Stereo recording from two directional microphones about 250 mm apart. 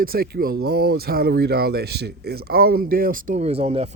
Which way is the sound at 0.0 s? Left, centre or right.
Right.